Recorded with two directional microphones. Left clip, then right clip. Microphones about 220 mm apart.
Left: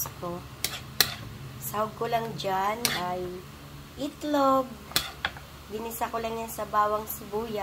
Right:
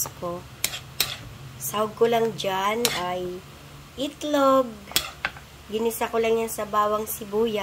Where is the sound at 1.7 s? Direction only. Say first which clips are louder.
Right 6 dB; 35° right (ahead or behind).